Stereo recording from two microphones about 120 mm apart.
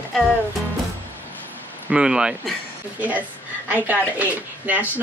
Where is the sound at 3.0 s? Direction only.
15° right (ahead or behind).